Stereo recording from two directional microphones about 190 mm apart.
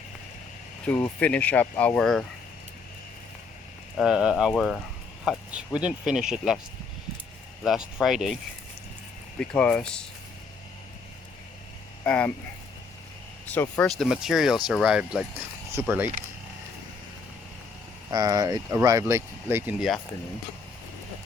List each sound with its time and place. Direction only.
0.9 s speech: 10° left (ahead or behind)
3.9 s speech: 5° right (ahead or behind)
7.6 s speech: centre (ahead or behind)
9.4 s speech: 5° left (ahead or behind)
12.0 s speech: 5° left (ahead or behind)
13.5 s speech: 10° left (ahead or behind)
14.0 s speech: centre (ahead or behind)
18.1 s speech: 20° right (ahead or behind)